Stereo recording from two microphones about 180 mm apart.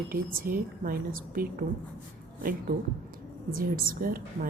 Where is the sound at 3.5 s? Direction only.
55° right (ahead or behind).